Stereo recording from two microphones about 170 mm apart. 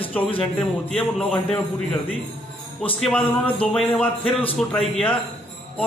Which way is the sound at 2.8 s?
5° left (ahead or behind).